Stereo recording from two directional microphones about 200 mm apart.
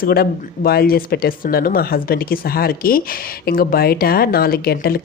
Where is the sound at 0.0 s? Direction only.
50° left (ahead or behind).